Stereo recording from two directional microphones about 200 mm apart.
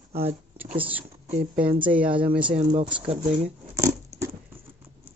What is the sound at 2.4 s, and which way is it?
Speech, 25° right (ahead or behind).